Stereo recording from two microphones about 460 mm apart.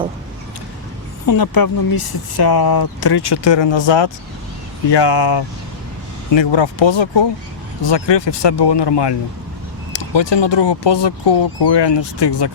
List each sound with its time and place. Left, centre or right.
1.3 s speech: left
6.3 s speech: left